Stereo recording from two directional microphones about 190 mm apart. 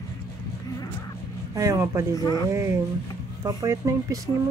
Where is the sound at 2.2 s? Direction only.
20° left (ahead or behind).